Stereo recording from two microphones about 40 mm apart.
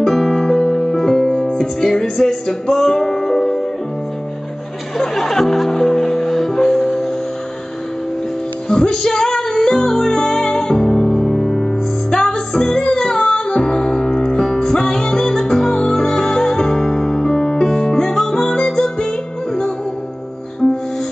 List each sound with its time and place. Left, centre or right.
0.0 s music: centre
4.9 s music: centre
8.6 s music: centre
12.1 s music: centre
20.6 s music: centre